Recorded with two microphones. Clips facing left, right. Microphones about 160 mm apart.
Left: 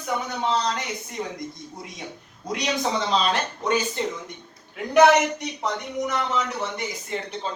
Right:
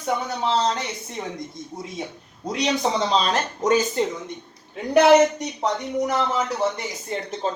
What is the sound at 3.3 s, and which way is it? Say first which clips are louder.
Speech: right 4 dB; 40° right (ahead or behind).